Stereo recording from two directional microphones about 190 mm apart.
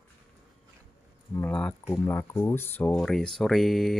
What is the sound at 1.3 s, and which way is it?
Speech, 10° left (ahead or behind).